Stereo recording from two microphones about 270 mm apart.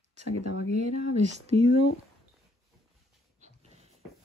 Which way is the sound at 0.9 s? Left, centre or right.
Right.